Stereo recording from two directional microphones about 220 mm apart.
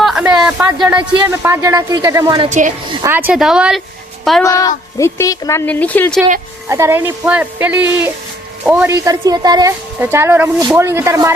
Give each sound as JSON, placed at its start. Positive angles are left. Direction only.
{"t": 0.0, "sound": "a sound", "side_deg": -5}
{"t": 1.2, "sound": "a woman's voice", "side_deg": -10}
{"t": 2.5, "sound": "a woman's voice", "side_deg": -35}
{"t": 2.9, "sound": "a woman's voice", "side_deg": -15}
{"t": 4.4, "sound": "speech", "side_deg": 15}
{"t": 6.7, "sound": "a woman's voice", "side_deg": -15}